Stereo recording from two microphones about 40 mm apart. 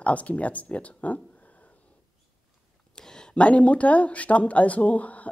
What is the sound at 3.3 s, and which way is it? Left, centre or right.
Speech, left.